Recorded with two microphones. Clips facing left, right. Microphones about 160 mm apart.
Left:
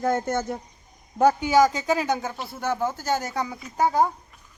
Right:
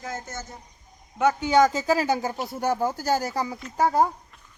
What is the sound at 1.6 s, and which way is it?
Speech, 5° right (ahead or behind).